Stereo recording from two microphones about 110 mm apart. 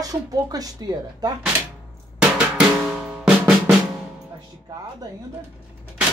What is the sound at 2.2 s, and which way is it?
Drum, 5° right (ahead or behind).